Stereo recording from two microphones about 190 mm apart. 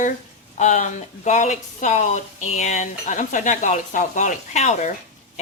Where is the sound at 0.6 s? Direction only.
40° left (ahead or behind).